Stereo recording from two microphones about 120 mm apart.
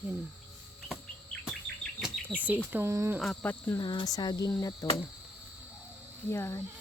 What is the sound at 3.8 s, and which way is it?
Cricket, 40° left (ahead or behind).